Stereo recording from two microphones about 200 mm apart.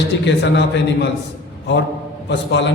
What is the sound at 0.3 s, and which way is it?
A man's voice, 60° left (ahead or behind).